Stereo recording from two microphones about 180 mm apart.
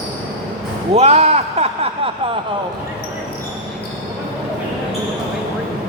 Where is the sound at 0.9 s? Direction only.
35° right (ahead or behind).